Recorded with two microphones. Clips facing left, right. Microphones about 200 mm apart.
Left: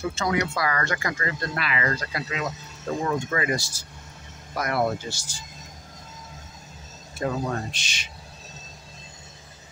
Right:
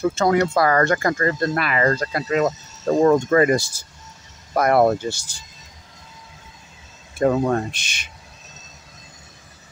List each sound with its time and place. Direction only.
0.0 s speech: 50° right (ahead or behind)
2.8 s speech: 85° right
3.1 s speech: 50° right (ahead or behind)
7.2 s speech: 55° right (ahead or behind)